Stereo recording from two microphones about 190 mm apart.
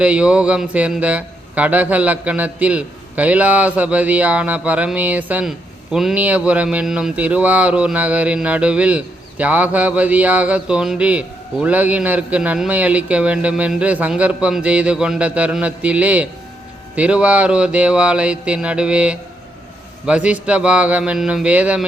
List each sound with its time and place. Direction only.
0.0 s speech: 5° right (ahead or behind)